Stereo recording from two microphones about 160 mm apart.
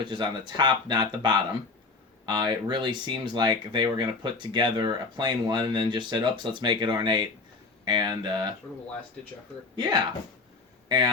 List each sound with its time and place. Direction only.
0.0 s speech: 30° right (ahead or behind)
9.7 s speech: 25° right (ahead or behind)